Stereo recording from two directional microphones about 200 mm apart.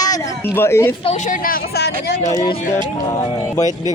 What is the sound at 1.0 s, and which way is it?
Speech, 35° left (ahead or behind).